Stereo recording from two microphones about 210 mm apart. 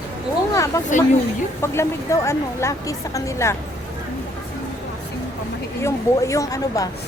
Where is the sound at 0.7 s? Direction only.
15° left (ahead or behind).